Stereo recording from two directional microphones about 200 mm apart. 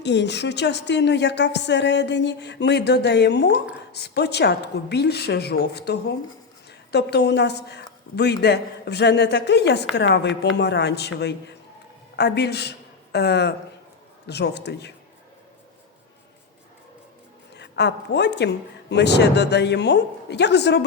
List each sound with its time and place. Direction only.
0.0 s a woman's voice: 60° left (ahead or behind)
17.5 s a woman's voice: 60° left (ahead or behind)